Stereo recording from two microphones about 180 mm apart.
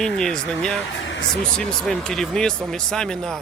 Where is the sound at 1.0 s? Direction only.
90° left.